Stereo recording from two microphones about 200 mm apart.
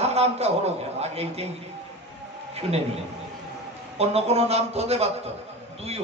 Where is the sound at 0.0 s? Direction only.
30° right (ahead or behind).